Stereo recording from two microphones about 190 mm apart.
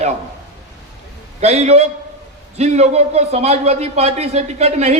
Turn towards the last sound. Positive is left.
turn(degrees=-35)  # may be behind; listen again after turning